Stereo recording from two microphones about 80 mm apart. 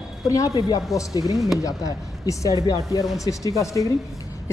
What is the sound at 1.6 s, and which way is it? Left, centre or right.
A woman's voice, left.